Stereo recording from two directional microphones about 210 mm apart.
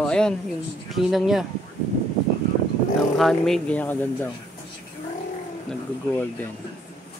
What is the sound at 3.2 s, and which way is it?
Speech, centre (ahead or behind).